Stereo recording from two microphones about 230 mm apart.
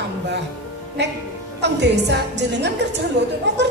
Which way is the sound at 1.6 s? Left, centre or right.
Right.